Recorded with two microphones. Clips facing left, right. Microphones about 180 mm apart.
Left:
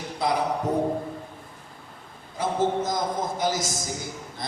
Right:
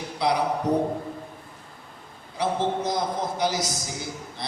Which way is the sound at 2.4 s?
45° left (ahead or behind).